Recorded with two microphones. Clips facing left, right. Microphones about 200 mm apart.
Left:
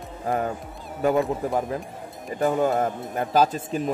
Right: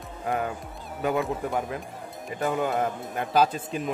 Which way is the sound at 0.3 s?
35° left (ahead or behind).